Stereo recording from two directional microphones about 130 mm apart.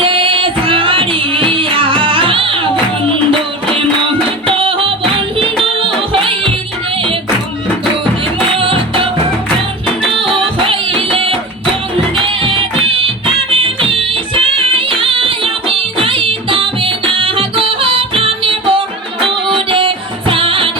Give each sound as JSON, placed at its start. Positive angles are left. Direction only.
{"t": 0.0, "sound": "music", "side_deg": -40}
{"t": 4.4, "sound": "music", "side_deg": -45}
{"t": 8.5, "sound": "music", "side_deg": -40}
{"t": 10.3, "sound": "music", "side_deg": -45}